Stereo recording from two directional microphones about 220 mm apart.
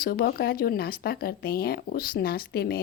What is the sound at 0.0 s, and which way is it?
A woman's voice, 45° left (ahead or behind).